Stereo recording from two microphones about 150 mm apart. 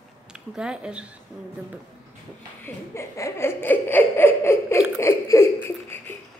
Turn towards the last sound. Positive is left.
turn(degrees=15)  # may be behind; listen again after turning